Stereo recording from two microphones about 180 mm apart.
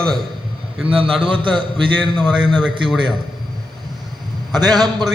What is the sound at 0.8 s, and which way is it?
Speech, 30° right (ahead or behind).